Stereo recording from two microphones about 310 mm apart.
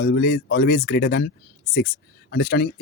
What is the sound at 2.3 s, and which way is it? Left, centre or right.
Speech, left.